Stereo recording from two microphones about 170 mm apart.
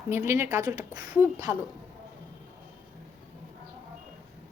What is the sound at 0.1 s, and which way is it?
A woman's voice, 15° right (ahead or behind).